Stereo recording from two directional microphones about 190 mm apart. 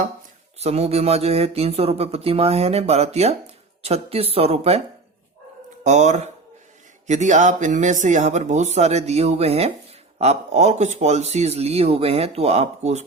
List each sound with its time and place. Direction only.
0.6 s speech: 35° right (ahead or behind)
5.8 s speech: 40° right (ahead or behind)